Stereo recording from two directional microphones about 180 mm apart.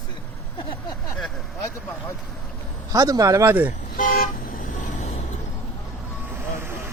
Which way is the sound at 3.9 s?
50° left (ahead or behind).